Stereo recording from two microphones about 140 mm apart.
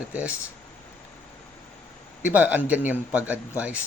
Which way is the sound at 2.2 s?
10° right (ahead or behind).